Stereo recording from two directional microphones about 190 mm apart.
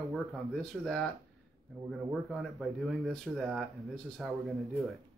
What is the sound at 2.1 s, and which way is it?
Speech, centre (ahead or behind).